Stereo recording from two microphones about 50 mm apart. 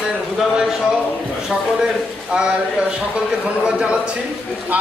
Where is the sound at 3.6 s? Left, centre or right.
Right.